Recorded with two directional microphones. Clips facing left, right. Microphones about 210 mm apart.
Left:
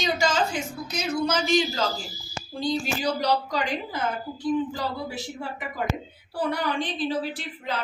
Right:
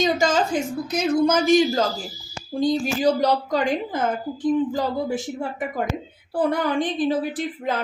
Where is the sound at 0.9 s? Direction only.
50° right (ahead or behind).